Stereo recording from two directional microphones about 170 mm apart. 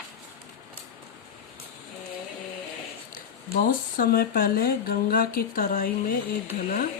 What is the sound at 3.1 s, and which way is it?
Speech, 55° left (ahead or behind).